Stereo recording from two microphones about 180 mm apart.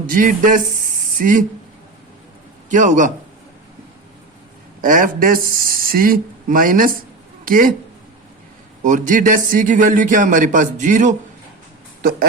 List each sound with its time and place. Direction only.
0.1 s a man's voice: 50° right (ahead or behind)
2.6 s a man's voice: 45° right (ahead or behind)
4.8 s a man's voice: 50° right (ahead or behind)
8.8 s a man's voice: 45° right (ahead or behind)